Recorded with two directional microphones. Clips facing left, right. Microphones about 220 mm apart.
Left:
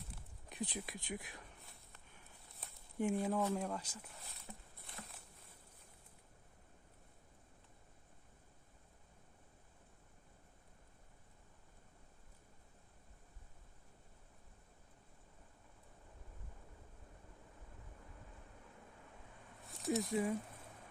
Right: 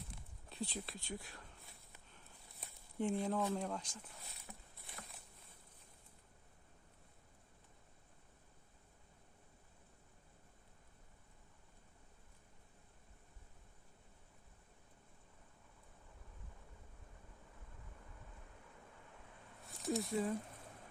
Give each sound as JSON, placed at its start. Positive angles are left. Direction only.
{"t": 0.4, "sound": "speech", "side_deg": 15}
{"t": 2.6, "sound": "speech", "side_deg": 5}
{"t": 19.6, "sound": "a sound", "side_deg": 0}